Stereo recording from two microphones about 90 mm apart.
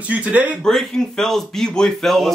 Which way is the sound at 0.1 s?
15° right (ahead or behind).